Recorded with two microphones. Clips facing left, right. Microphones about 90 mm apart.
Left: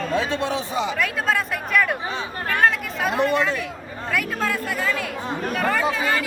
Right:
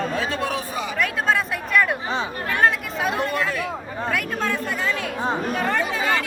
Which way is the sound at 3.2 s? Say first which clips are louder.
Left 4 dB; 20° left (ahead or behind).